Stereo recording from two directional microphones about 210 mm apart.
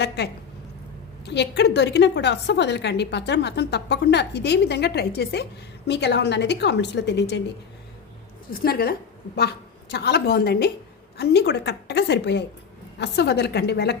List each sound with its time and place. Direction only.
1.2 s a woman's voice: 55° left (ahead or behind)
8.4 s a woman's voice: 45° left (ahead or behind)